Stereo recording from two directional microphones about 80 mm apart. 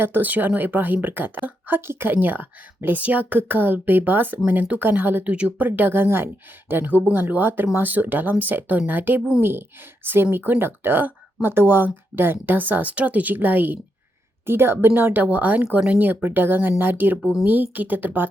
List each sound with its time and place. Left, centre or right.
0.0 s speech: right